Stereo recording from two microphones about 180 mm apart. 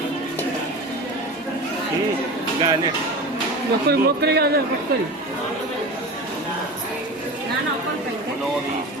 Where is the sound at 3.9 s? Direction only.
65° right (ahead or behind).